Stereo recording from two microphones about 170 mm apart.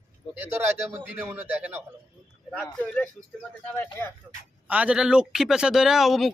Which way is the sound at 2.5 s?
5° left (ahead or behind).